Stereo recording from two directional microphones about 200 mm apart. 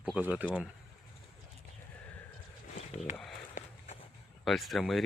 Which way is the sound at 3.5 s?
35° left (ahead or behind).